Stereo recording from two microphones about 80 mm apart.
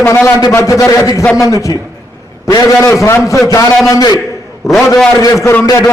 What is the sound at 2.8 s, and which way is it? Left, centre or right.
A man's voice, left.